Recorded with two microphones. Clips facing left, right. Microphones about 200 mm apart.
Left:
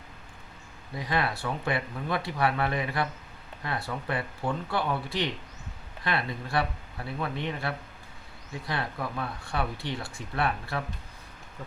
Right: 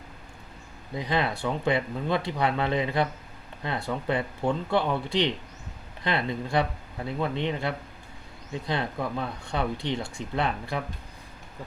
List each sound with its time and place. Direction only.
0.9 s speech: 20° right (ahead or behind)